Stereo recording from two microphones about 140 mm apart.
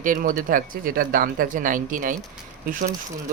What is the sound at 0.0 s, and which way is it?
Speech, 75° right (ahead or behind).